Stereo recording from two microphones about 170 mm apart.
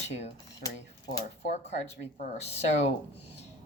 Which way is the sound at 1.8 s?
40° left (ahead or behind).